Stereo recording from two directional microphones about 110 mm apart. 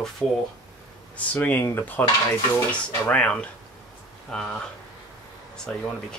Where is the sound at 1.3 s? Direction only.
15° left (ahead or behind).